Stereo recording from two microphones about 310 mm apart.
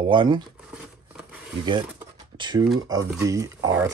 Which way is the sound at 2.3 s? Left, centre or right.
Centre.